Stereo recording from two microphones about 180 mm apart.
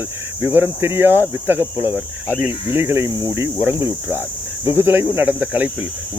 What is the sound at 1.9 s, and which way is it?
Speech, 15° left (ahead or behind).